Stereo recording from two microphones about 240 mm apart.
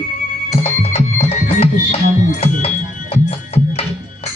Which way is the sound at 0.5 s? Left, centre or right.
Left.